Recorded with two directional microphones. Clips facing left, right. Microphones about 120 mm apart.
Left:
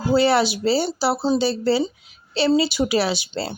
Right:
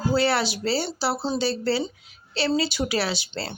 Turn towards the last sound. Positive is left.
turn(degrees=15)  # may be behind; listen again after turning